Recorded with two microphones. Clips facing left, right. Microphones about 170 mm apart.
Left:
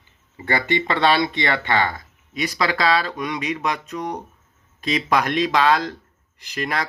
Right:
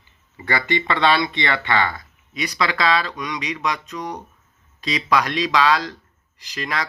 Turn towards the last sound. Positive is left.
turn(degrees=50)  # may be behind; listen again after turning